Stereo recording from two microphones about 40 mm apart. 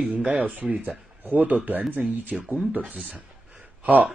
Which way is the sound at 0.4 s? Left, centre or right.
Right.